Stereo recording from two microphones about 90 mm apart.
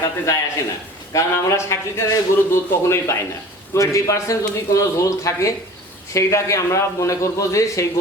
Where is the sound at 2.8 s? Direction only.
30° left (ahead or behind).